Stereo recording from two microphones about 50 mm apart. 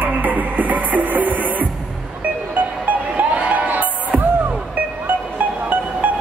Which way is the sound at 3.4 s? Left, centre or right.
Right.